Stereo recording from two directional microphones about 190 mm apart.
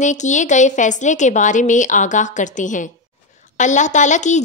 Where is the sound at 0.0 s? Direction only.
40° left (ahead or behind).